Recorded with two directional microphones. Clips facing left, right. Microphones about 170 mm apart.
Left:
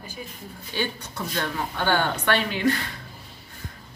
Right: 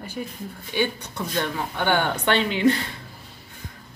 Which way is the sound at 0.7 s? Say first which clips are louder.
Right 4 dB; 15° right (ahead or behind).